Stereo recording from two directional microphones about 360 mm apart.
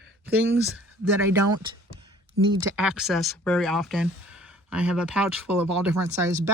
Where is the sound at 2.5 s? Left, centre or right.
Centre.